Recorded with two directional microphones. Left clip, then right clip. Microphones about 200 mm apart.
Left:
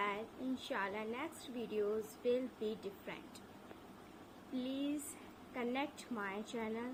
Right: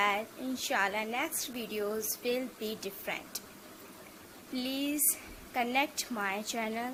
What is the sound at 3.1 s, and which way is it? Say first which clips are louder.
Speech: right 14 dB; 40° right (ahead or behind).